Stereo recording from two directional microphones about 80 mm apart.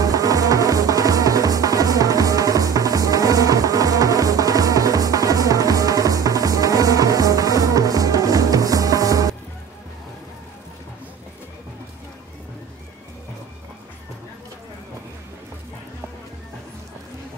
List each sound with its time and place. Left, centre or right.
0.0 s music: right